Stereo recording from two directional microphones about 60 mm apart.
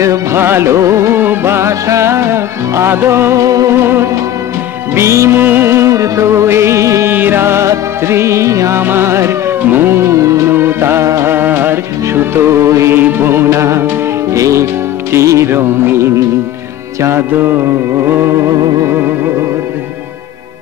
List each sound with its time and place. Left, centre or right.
0.0 s music: right
0.4 s music: right
1.2 s music: right
3.4 s music: right
3.8 s music: right
4.9 s music: right
5.4 s music: right
7.1 s music: right
7.6 s music: right
8.7 s music: right
10.5 s music: right
12.9 s music: right
15.5 s music: right